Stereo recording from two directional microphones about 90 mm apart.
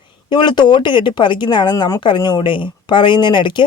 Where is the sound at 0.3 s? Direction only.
60° left (ahead or behind).